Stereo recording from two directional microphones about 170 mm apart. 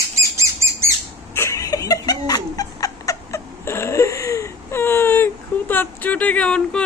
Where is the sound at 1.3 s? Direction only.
15° left (ahead or behind).